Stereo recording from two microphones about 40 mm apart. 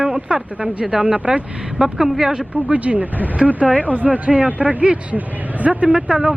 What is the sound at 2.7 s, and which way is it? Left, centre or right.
Speech, right.